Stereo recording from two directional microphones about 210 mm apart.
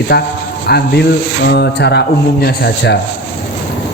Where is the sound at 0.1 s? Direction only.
50° left (ahead or behind).